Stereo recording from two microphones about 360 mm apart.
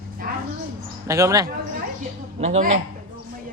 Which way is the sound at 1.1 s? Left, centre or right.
Centre.